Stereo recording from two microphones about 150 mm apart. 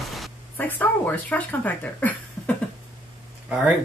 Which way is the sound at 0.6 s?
10° left (ahead or behind).